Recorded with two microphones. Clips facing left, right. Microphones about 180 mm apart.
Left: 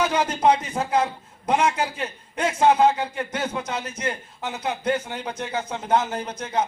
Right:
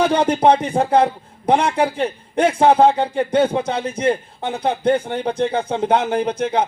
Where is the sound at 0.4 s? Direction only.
60° right (ahead or behind).